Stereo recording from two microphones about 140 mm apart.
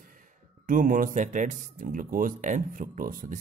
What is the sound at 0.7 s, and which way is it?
Speech, 75° right (ahead or behind).